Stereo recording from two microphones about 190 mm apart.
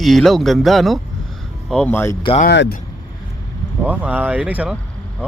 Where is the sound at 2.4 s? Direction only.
65° left (ahead or behind).